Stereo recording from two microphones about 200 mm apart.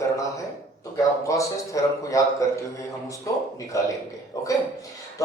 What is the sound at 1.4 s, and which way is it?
A man's voice, 15° left (ahead or behind).